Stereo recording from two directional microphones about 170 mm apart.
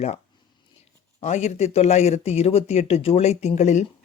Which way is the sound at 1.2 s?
40° left (ahead or behind).